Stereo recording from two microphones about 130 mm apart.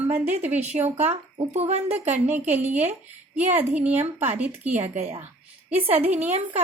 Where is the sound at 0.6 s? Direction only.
60° right (ahead or behind).